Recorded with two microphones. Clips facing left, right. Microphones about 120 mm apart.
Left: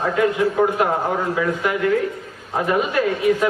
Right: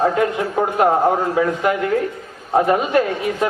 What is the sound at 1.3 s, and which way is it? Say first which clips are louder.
A man's voice: right 3 dB; 40° right (ahead or behind).